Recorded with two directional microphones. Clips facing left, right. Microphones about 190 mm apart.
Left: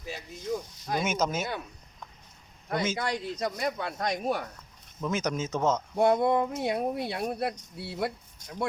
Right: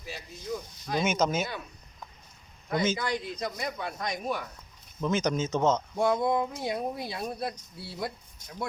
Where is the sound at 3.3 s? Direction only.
40° left (ahead or behind).